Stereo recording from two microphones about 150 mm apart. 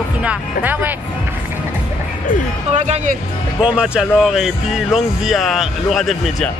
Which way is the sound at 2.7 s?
50° right (ahead or behind).